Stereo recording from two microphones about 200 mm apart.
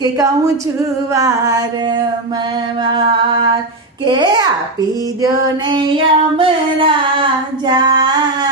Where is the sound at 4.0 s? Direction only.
20° right (ahead or behind).